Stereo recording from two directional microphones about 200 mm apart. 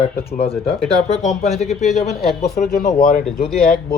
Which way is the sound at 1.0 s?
35° left (ahead or behind).